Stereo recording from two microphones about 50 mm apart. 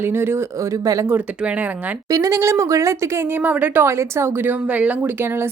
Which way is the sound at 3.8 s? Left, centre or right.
Right.